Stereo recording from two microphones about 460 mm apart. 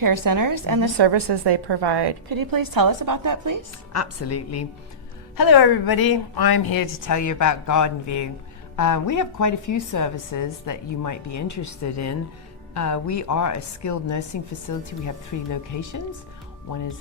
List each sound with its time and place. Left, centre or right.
0.0 s a woman's voice: right
3.9 s a woman's voice: left
5.4 s a woman's voice: left